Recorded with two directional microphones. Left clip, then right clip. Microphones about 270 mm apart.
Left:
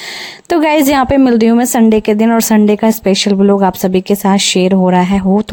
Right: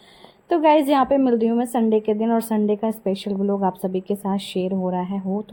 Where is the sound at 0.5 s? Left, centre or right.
Left.